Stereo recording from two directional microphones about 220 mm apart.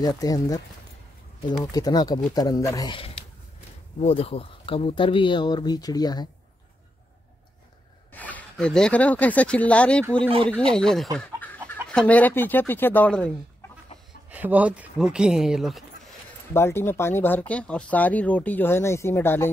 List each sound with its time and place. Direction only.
0.0 s speech: 15° left (ahead or behind)
1.6 s speech: 15° left (ahead or behind)
8.1 s speech: 5° left (ahead or behind)
11.1 s chicken: 5° left (ahead or behind)
11.9 s speech: 5° left (ahead or behind)
14.3 s speech: 5° right (ahead or behind)
16.5 s speech: 10° left (ahead or behind)